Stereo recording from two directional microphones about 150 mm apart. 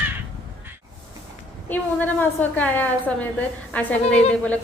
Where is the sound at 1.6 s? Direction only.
10° left (ahead or behind).